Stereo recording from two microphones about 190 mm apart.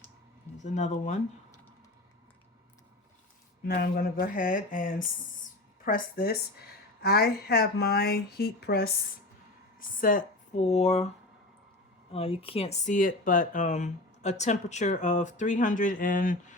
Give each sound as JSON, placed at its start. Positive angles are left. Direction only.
{"t": 0.6, "sound": "speech", "side_deg": 40}
{"t": 3.7, "sound": "a sound", "side_deg": 55}
{"t": 5.8, "sound": "a woman's voice", "side_deg": 50}
{"t": 10.0, "sound": "speech", "side_deg": 45}
{"t": 12.1, "sound": "speech", "side_deg": 30}